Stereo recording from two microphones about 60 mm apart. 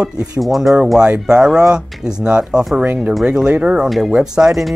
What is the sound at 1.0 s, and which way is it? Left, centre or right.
Speech, centre.